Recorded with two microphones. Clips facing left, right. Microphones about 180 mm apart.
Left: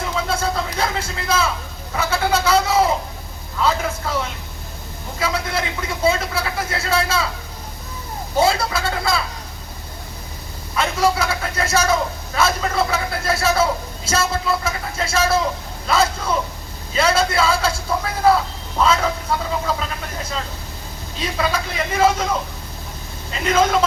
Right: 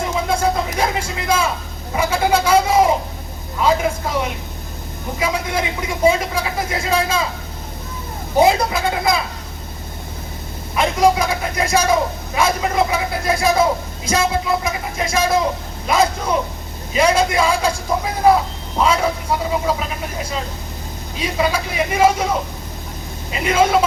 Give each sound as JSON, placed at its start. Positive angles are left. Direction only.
{"t": 0.3, "sound": "a sound", "side_deg": -15}
{"t": 0.8, "sound": "speech", "side_deg": -15}
{"t": 8.4, "sound": "speech", "side_deg": -15}
{"t": 10.8, "sound": "speech", "side_deg": -15}
{"t": 21.2, "sound": "speech", "side_deg": -10}
{"t": 23.3, "sound": "speech", "side_deg": -10}